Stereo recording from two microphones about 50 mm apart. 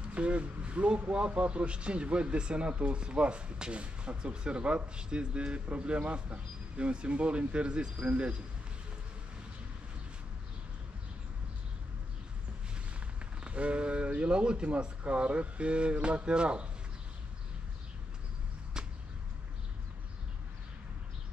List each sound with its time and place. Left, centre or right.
0.1 s speech: right
13.0 s speech: right
18.8 s a sound: centre